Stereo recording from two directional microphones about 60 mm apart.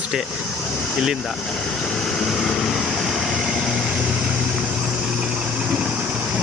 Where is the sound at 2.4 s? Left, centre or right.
Centre.